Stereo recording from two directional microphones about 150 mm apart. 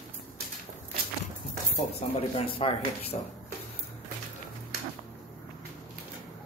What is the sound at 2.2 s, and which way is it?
Speech, 40° left (ahead or behind).